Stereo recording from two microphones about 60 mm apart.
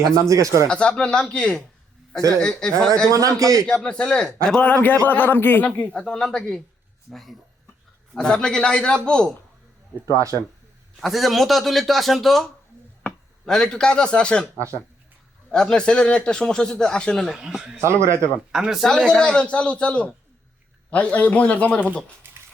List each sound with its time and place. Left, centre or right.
0.3 s speech: right
0.7 s a man's voice: centre
3.2 s a man's voice: right
3.8 s a man's voice: centre
8.1 s a man's voice: centre
10.1 s a man's voice: right
11.0 s a man's voice: centre
15.5 s a man's voice: centre
17.3 s a man's voice: centre
17.8 s speech: right
18.5 s a man's voice: centre
18.9 s a man's voice: centre